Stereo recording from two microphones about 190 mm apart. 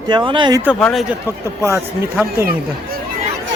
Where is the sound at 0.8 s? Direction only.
5° left (ahead or behind).